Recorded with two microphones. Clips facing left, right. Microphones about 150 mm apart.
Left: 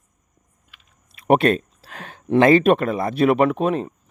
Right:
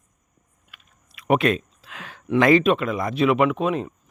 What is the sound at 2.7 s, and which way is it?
Speech, 45° left (ahead or behind).